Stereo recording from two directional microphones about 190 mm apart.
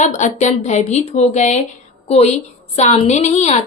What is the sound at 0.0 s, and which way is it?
A woman's voice, 40° left (ahead or behind).